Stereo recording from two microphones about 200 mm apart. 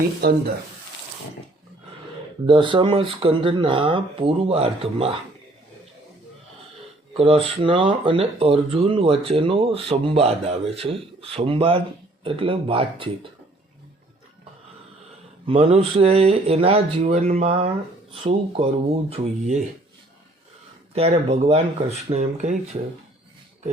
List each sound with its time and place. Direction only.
0.2 s speech: 55° right (ahead or behind)
2.5 s speech: 25° right (ahead or behind)
7.1 s speech: 30° right (ahead or behind)
15.4 s speech: 30° right (ahead or behind)
20.9 s speech: 30° right (ahead or behind)